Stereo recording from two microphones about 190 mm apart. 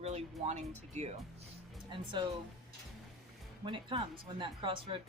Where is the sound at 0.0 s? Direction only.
35° right (ahead or behind).